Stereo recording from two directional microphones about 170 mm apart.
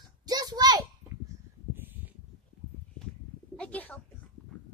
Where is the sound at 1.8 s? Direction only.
10° right (ahead or behind).